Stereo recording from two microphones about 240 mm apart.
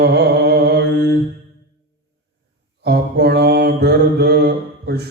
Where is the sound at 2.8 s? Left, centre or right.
Right.